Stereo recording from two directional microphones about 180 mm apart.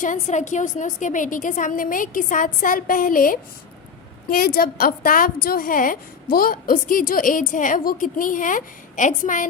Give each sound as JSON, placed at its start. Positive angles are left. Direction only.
{"t": 0.0, "sound": "a woman's voice", "side_deg": 45}